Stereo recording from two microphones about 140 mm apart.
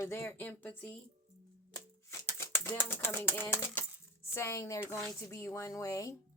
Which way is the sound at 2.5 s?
15° left (ahead or behind).